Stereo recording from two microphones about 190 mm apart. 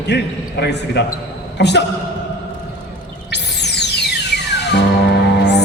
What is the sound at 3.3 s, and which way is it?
Music, 60° left (ahead or behind).